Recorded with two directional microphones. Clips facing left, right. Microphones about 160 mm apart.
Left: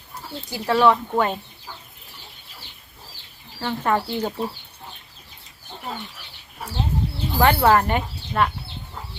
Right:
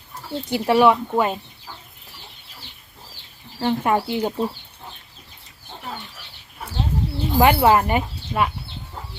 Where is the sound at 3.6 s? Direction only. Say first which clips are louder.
Right 3 dB; 15° right (ahead or behind).